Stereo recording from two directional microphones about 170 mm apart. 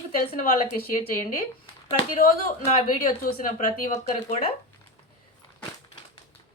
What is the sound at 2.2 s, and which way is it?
A woman's voice, 55° left (ahead or behind).